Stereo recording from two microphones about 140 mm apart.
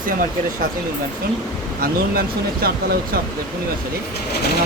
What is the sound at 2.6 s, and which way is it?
Speech, 90° right.